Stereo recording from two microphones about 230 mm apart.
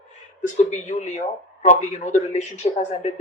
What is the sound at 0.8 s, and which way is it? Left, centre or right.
Speech, left.